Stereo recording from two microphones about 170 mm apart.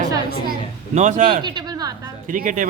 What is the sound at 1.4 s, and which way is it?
Speech, 25° right (ahead or behind).